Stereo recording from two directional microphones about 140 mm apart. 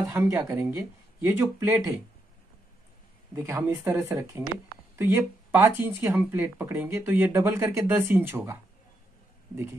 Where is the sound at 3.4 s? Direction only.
20° right (ahead or behind).